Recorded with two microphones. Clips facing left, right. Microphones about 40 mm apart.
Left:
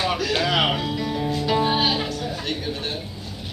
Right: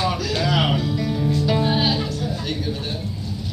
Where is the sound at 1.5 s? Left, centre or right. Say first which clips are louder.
Left 2 dB; centre.